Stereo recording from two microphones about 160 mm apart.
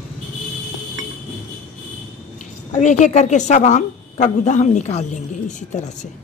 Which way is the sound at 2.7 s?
50° left (ahead or behind).